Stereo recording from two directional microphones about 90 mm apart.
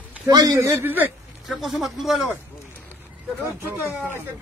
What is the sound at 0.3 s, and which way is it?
Speech, 45° right (ahead or behind).